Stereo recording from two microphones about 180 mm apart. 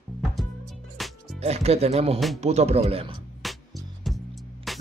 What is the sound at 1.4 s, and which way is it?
Speech, 35° right (ahead or behind).